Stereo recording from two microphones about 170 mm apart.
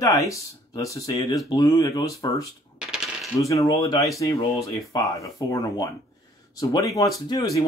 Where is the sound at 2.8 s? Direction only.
5° right (ahead or behind).